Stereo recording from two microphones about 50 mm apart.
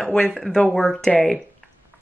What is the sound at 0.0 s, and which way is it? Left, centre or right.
Speech, centre.